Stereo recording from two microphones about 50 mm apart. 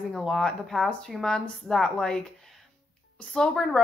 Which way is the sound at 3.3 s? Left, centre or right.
Centre.